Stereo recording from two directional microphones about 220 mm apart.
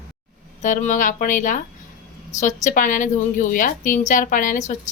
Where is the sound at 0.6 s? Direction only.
35° left (ahead or behind).